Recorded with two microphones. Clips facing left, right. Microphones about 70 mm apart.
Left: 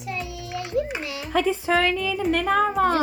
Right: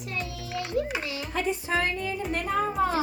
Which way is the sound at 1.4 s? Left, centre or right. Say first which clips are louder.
Left 5 dB; left.